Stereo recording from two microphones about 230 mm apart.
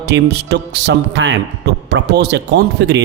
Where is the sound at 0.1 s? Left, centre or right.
Right.